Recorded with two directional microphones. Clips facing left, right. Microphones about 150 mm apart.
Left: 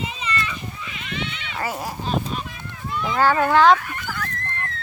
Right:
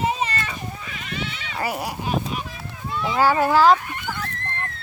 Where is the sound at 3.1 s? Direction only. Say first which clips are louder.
Even; 10° right (ahead or behind).